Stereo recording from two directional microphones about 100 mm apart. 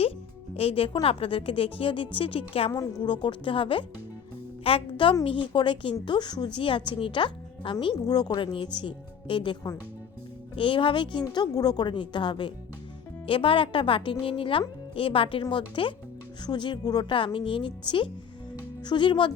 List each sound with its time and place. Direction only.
0.5 s speech: 70° left (ahead or behind)
2.7 s a woman's voice: 45° left (ahead or behind)
8.5 s a woman's voice: 55° left (ahead or behind)